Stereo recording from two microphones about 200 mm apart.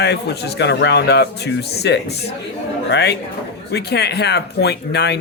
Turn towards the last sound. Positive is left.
turn(degrees=55)  # may be behind; listen again after turning